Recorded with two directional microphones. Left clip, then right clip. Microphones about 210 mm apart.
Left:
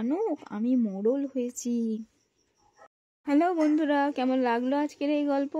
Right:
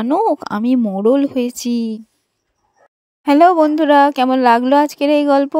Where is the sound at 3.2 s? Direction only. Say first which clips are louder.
Right 14 dB; 45° right (ahead or behind).